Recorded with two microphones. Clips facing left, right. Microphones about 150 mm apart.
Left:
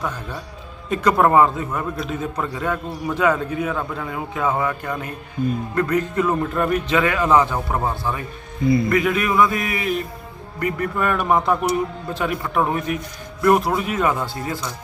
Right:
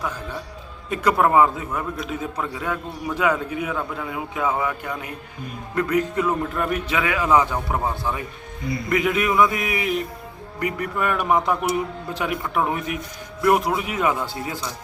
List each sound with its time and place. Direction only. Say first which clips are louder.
0.9 s a man's voice: left 2 dB; 5° right (ahead or behind)
8.9 s a man's voice: left 2 dB; 20° right (ahead or behind)